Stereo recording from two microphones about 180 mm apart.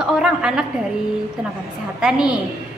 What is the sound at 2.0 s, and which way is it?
Speech, 5° right (ahead or behind).